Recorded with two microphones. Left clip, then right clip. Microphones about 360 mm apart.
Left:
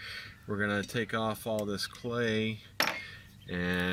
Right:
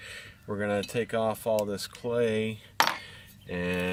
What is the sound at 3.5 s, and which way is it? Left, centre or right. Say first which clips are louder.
Speech: right 2 dB; centre.